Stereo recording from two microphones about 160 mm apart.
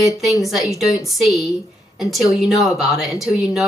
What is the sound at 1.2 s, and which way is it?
Speech, centre (ahead or behind).